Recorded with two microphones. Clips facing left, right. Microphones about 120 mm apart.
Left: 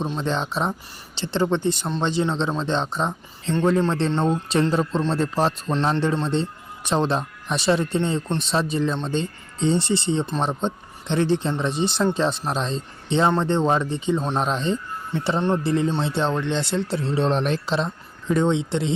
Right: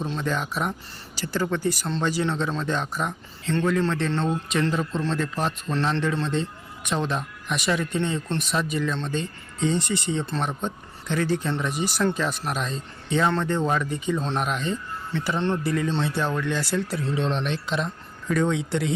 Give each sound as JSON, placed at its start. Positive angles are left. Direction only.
{"t": 0.0, "sound": "speech", "side_deg": 25}